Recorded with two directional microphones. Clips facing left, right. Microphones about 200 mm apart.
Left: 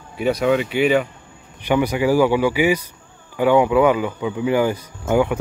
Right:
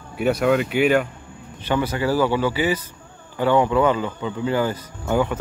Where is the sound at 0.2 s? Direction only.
5° right (ahead or behind).